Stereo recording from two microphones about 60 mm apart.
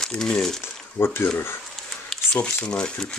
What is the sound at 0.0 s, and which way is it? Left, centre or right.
Speech, centre.